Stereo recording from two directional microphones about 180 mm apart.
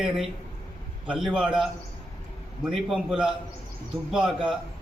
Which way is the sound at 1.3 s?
5° right (ahead or behind).